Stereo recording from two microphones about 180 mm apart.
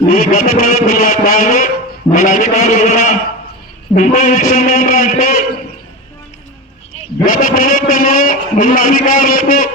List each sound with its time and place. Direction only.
0.1 s a man's voice: 50° left (ahead or behind)
7.3 s a man's voice: 50° left (ahead or behind)